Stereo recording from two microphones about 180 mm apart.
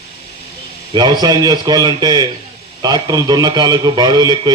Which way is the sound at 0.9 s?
25° right (ahead or behind).